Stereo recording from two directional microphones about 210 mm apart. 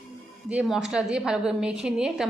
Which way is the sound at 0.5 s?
5° right (ahead or behind).